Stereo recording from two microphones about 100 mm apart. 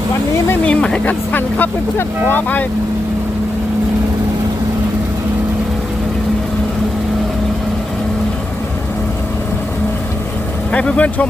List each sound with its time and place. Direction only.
0.6 s speech: 10° left (ahead or behind)
10.7 s speech: 10° left (ahead or behind)